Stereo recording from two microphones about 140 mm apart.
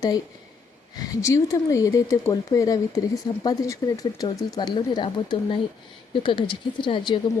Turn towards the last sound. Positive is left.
turn(degrees=35)  # may be behind; listen again after turning